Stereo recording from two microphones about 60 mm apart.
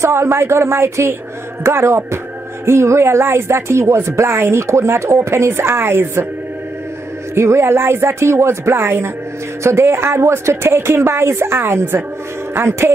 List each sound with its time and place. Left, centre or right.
0.0 s speech: right
7.3 s speech: right